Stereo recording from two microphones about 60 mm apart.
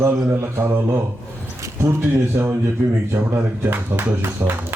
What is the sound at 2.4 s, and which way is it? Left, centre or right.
Speech, right.